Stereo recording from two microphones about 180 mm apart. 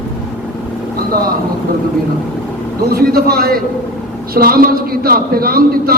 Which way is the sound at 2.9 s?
60° right (ahead or behind).